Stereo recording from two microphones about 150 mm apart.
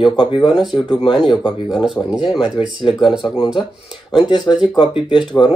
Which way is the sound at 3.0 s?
Centre (ahead or behind).